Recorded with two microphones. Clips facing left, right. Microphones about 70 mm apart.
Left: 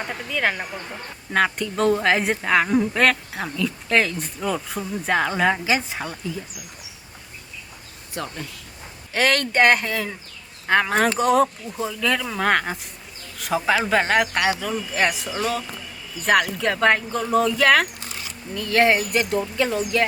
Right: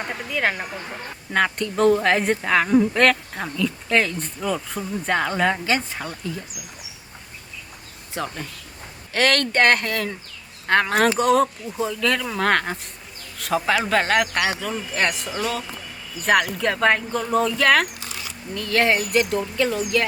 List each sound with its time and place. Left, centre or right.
0.1 s a woman's voice: centre
8.1 s speech: right
9.1 s a woman's voice: centre
18.5 s speech: centre
18.9 s speech: left